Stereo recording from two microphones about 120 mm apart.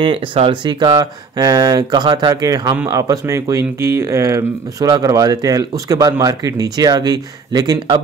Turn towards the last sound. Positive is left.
turn(degrees=-35)  # may be behind; listen again after turning